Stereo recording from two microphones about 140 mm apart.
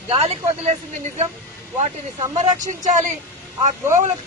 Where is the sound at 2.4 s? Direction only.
60° right (ahead or behind).